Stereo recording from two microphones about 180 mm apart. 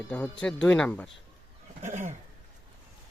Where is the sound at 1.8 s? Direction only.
40° right (ahead or behind).